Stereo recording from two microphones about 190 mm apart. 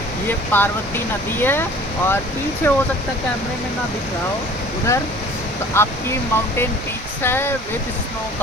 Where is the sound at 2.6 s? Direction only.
15° left (ahead or behind).